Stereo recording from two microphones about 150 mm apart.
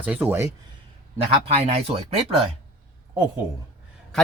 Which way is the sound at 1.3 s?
40° right (ahead or behind).